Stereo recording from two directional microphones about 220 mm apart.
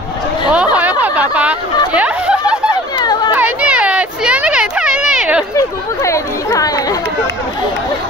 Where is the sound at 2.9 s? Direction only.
20° left (ahead or behind).